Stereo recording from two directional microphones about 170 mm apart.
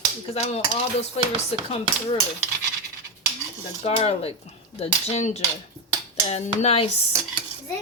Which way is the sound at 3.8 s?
35° left (ahead or behind).